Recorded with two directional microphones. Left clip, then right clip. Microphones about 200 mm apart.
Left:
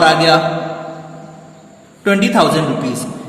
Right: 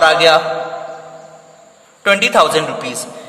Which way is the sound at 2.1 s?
55° right (ahead or behind).